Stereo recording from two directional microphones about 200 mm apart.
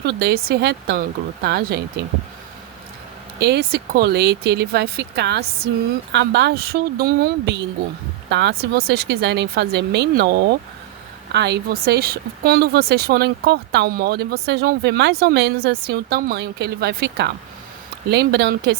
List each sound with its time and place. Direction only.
0.0 s speech: 55° right (ahead or behind)
3.4 s speech: 55° right (ahead or behind)